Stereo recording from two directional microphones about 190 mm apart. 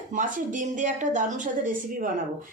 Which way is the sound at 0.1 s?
45° right (ahead or behind).